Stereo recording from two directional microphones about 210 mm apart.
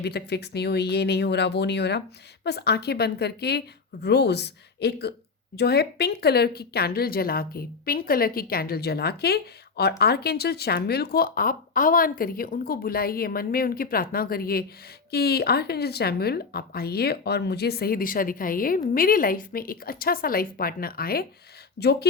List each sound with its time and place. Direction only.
0.0 s speech: 50° left (ahead or behind)